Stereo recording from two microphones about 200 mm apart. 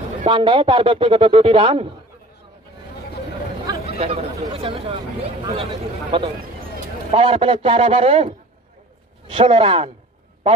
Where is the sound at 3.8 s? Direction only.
30° right (ahead or behind).